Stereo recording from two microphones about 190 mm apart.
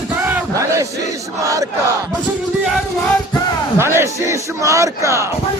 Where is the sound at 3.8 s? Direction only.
15° right (ahead or behind).